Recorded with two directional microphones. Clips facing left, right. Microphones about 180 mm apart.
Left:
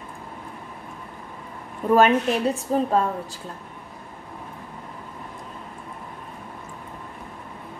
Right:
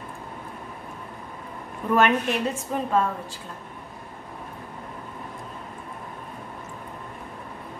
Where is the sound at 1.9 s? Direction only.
30° left (ahead or behind).